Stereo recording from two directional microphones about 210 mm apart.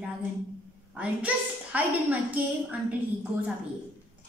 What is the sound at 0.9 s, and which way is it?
A woman's voice, 5° right (ahead or behind).